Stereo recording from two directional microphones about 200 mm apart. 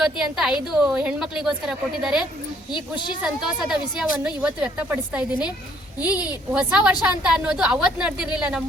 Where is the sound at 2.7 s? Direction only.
20° left (ahead or behind).